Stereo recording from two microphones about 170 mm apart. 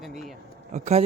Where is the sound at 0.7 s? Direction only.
40° right (ahead or behind).